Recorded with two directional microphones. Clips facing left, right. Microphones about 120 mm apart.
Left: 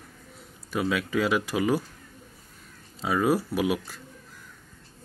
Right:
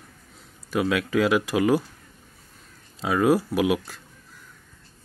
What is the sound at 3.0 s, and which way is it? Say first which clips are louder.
Speech: right 3 dB; 5° right (ahead or behind).